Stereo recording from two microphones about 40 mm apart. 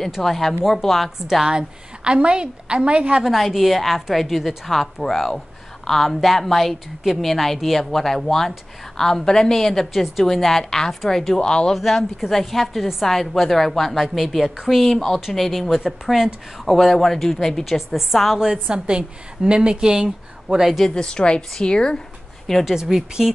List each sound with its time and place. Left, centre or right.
0.2 s a woman's voice: centre
1.4 s a woman's voice: centre
2.1 s a woman's voice: right
3.3 s a woman's voice: centre
11.7 s a woman's voice: centre
17.7 s a woman's voice: centre
18.4 s a woman's voice: centre
20.9 s a woman's voice: left
22.7 s a woman's voice: centre